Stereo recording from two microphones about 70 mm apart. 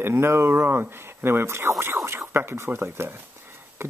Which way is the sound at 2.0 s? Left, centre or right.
Right.